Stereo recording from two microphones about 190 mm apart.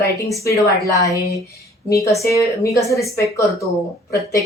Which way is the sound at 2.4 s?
15° left (ahead or behind).